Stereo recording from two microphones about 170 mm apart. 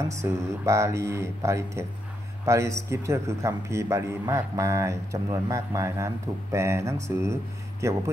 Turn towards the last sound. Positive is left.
turn(degrees=-15)  # may be behind; listen again after turning